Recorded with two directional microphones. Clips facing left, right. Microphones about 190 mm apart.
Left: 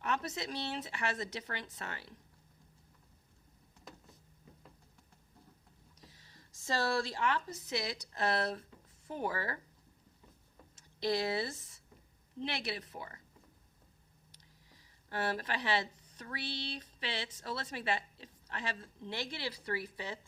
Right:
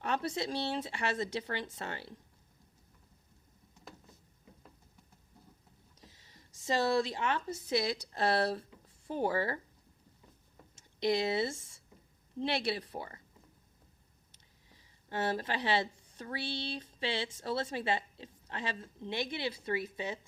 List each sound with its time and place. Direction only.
0.0 s speech: 30° right (ahead or behind)
6.1 s speech: 20° right (ahead or behind)
11.0 s speech: 20° right (ahead or behind)
15.1 s speech: 25° right (ahead or behind)